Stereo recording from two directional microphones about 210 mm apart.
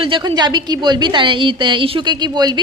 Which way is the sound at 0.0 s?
25° right (ahead or behind).